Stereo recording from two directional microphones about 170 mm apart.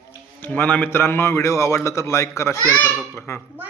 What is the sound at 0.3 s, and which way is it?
A man's voice, 10° left (ahead or behind).